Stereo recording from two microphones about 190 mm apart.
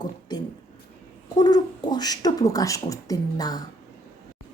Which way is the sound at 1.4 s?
20° left (ahead or behind).